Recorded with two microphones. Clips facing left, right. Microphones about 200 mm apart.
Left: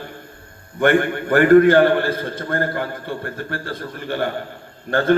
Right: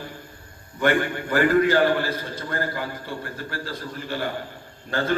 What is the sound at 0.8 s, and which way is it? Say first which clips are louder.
A man's voice: left 5 dB; 55° left (ahead or behind).